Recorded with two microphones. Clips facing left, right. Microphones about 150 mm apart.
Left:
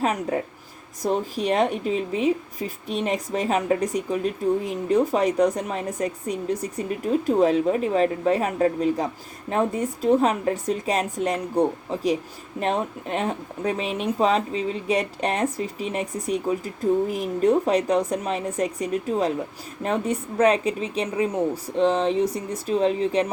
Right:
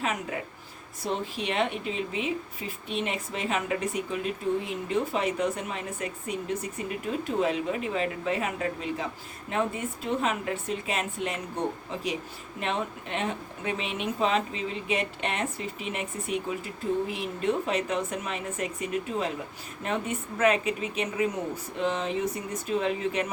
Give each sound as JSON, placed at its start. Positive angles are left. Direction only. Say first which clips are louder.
{"t": 0.0, "sound": "speech", "louder": "left 7 dB", "side_deg": 40}